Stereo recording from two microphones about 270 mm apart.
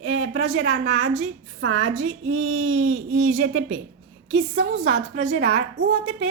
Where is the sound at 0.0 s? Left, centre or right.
Right.